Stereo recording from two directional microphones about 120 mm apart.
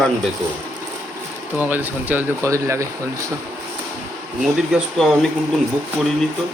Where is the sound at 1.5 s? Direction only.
15° right (ahead or behind).